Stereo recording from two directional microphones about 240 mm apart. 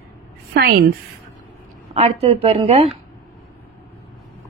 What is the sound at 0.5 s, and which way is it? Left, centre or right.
Speech, right.